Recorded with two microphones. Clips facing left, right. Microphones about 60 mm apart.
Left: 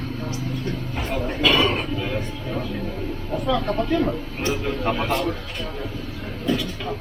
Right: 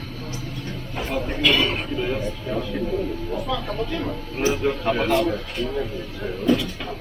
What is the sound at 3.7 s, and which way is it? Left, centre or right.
Speech, left.